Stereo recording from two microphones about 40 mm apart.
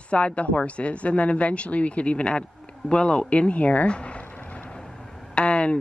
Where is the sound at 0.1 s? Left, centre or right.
Left.